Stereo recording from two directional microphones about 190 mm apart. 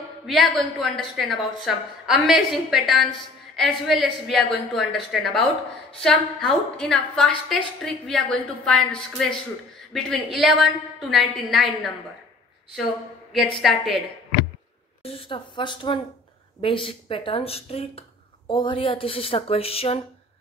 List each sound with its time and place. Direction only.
0.3 s a woman's voice: centre (ahead or behind)
13.6 s a woman's voice: centre (ahead or behind)
15.0 s speech: 25° left (ahead or behind)